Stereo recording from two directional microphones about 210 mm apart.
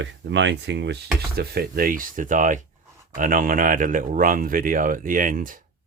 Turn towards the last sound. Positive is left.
turn(degrees=-40)  # may be behind; listen again after turning